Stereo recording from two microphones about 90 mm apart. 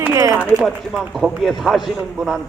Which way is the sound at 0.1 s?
35° right (ahead or behind).